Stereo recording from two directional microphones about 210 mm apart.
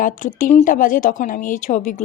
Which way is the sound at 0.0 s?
40° left (ahead or behind).